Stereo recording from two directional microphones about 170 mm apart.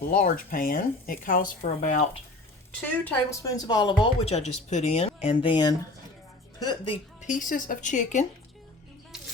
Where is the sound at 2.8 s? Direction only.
10° left (ahead or behind); by 6.9 s 25° left (ahead or behind).